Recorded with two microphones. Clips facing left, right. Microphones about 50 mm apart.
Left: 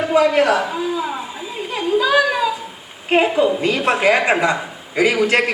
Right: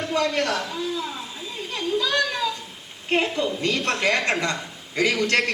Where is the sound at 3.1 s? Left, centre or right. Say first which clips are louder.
Left 8 dB; centre.